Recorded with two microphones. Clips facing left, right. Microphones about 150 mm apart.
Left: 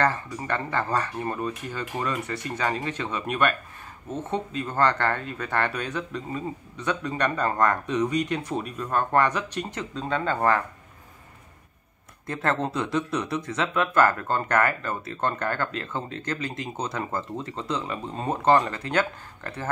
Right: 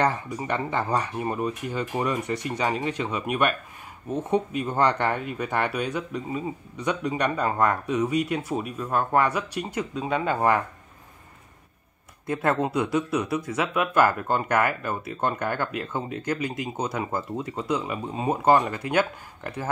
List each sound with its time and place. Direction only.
0.0 s speech: 15° right (ahead or behind)
12.3 s speech: 10° right (ahead or behind)